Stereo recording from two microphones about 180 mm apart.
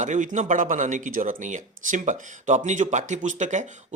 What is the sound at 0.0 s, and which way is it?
A man's voice, 45° right (ahead or behind).